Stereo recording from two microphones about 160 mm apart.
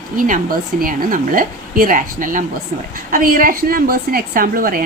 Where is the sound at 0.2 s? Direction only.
60° right (ahead or behind).